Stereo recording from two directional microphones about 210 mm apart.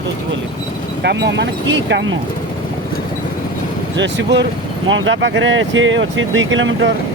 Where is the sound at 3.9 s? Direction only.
55° right (ahead or behind).